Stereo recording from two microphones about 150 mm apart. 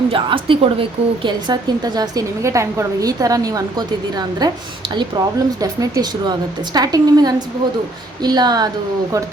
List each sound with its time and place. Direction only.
0.1 s a woman's voice: 35° right (ahead or behind)